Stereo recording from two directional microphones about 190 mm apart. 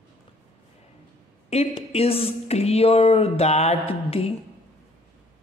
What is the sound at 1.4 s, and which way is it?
A woman's voice, 35° left (ahead or behind).